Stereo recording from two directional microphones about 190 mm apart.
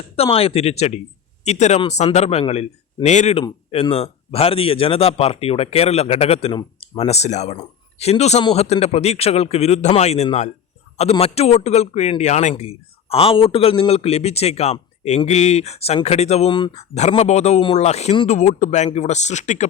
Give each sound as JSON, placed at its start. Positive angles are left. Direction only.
{"t": 0.2, "sound": "a man's voice", "side_deg": 30}
{"t": 16.7, "sound": "a man's voice", "side_deg": 35}